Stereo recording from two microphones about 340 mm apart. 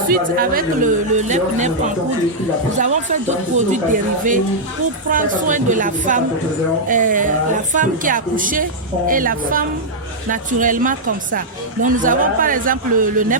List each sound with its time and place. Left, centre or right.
0.1 s a woman's voice: right
2.7 s a woman's voice: right